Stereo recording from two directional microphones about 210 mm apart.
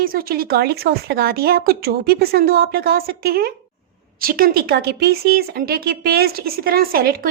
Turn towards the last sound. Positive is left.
turn(degrees=-45)  # may be behind; listen again after turning